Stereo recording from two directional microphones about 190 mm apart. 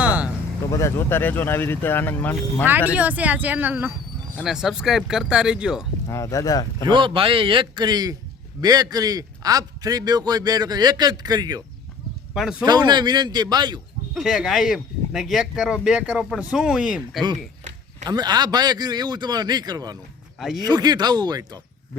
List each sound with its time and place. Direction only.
0.0 s vehicle: 10° right (ahead or behind)
0.7 s speech: 15° left (ahead or behind)
2.9 s speech: 5° right (ahead or behind)
6.1 s speech: 15° left (ahead or behind)
6.8 s a man's voice: 25° right (ahead or behind)
12.3 s speech: 5° right (ahead or behind)
12.6 s a man's voice: 20° right (ahead or behind)
14.1 s speech: centre (ahead or behind)
18.0 s a man's voice: 20° right (ahead or behind)